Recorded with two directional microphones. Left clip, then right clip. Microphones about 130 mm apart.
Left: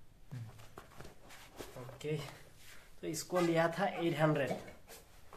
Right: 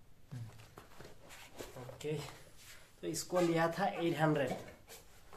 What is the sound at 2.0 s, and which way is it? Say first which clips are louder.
Speech: left 1 dB; centre (ahead or behind).